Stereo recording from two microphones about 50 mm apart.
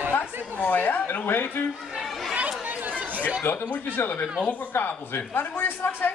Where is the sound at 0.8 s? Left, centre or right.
Left.